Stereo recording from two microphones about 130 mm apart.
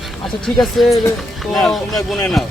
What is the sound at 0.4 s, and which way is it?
Speech, centre (ahead or behind).